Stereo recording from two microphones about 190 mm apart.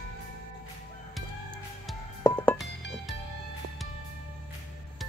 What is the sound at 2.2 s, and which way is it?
Music, 10° left (ahead or behind).